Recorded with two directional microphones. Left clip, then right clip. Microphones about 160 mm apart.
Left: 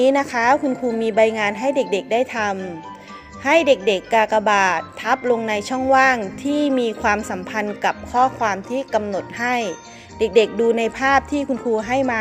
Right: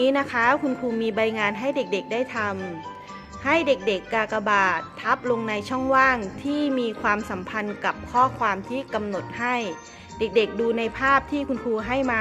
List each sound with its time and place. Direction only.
0.0 s a woman's voice: 10° left (ahead or behind)